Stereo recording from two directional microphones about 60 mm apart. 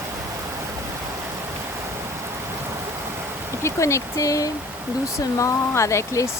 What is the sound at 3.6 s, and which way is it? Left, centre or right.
Speech, left.